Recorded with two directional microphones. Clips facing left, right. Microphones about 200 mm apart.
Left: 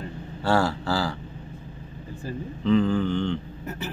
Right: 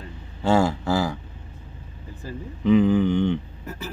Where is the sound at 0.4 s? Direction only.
20° right (ahead or behind).